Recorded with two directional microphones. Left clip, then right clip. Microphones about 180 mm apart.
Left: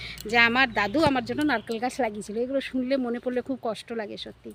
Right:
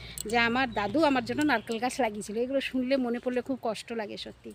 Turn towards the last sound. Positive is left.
turn(degrees=0)  # may be behind; listen again after turning